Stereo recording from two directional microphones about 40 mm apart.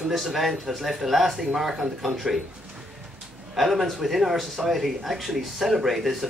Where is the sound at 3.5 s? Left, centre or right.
Centre.